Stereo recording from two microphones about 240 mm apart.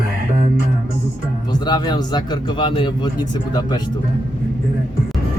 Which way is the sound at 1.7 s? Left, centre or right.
Centre.